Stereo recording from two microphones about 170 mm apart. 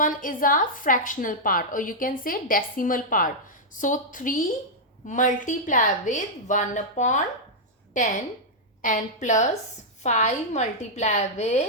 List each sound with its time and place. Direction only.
0.0 s a woman's voice: 50° left (ahead or behind)